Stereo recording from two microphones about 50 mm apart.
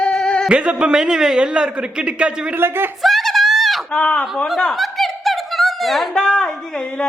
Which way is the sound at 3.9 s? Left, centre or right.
Left.